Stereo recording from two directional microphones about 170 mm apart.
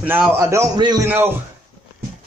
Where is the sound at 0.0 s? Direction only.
10° right (ahead or behind).